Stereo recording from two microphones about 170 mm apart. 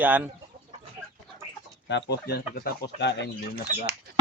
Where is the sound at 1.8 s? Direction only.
80° left.